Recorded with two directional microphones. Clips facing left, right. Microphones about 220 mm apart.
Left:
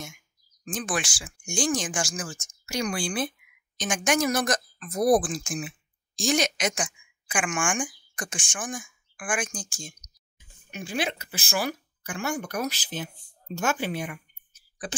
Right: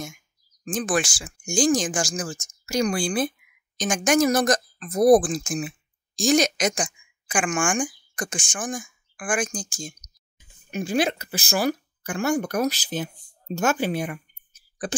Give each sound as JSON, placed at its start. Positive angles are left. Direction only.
{"t": 0.7, "sound": "speech", "side_deg": -45}